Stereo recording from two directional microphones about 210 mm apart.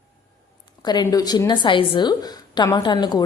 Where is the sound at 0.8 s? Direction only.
20° left (ahead or behind).